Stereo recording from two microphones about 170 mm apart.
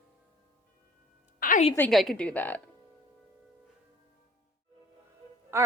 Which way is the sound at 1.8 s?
Centre (ahead or behind).